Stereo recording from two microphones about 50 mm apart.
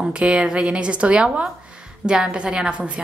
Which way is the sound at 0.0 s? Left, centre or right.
Centre.